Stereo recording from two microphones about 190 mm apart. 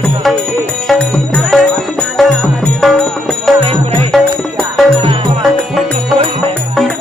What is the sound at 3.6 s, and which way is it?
Music, 30° right (ahead or behind).